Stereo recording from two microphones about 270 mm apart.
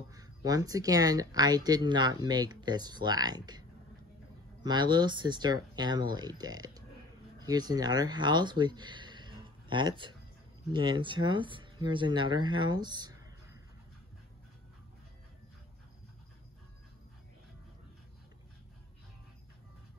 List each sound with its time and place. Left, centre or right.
0.1 s speech: centre
4.6 s speech: centre